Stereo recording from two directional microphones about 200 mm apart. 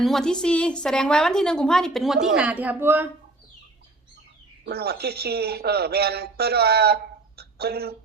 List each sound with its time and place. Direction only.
0.0 s a woman's voice: centre (ahead or behind)
4.6 s speech: 50° right (ahead or behind)